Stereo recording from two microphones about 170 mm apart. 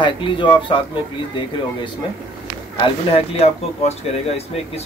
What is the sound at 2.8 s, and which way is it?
Speech, 35° left (ahead or behind).